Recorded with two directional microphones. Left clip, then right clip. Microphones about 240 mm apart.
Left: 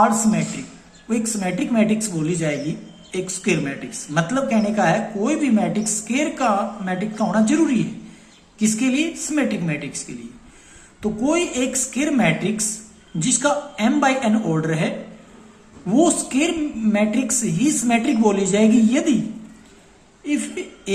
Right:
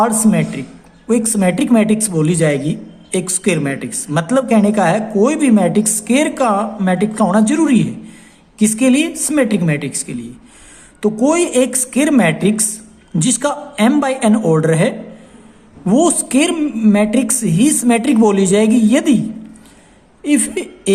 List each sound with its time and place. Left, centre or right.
0.0 s speech: right
20.2 s a woman's voice: right